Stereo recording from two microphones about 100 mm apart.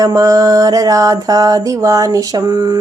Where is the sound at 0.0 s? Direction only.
35° right (ahead or behind).